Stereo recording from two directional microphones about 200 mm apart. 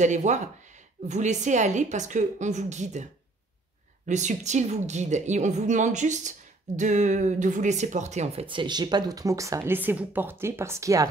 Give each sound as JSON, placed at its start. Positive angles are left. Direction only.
{"t": 0.0, "sound": "a woman's voice", "side_deg": -35}